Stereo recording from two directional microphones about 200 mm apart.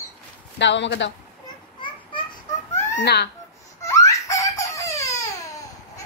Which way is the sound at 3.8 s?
15° left (ahead or behind).